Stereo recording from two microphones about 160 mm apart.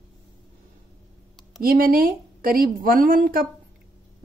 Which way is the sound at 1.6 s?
65° right (ahead or behind).